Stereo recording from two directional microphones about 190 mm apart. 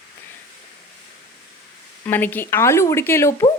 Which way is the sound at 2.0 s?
10° left (ahead or behind).